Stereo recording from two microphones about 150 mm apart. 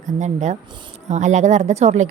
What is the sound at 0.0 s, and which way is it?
Speech, 55° right (ahead or behind).